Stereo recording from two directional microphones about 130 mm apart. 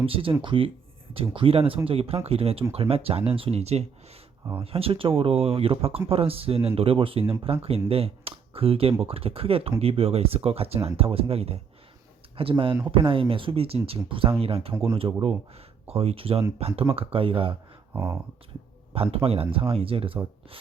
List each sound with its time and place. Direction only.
0.0 s speech: 45° right (ahead or behind)
17.9 s speech: 15° right (ahead or behind)
18.9 s speech: 50° right (ahead or behind)